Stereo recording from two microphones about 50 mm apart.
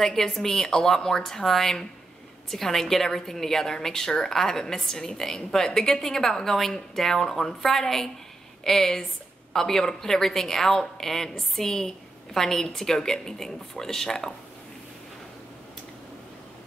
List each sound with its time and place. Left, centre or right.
0.0 s a woman's voice: centre